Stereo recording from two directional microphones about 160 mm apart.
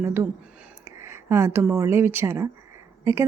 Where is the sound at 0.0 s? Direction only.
15° right (ahead or behind).